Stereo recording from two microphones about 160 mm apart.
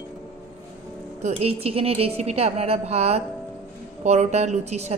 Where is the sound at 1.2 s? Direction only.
40° right (ahead or behind).